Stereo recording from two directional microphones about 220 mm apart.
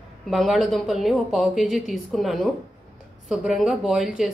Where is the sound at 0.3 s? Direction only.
Centre (ahead or behind).